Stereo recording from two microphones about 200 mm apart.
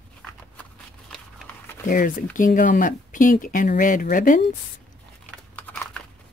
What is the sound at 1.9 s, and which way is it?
Speech, 45° left (ahead or behind).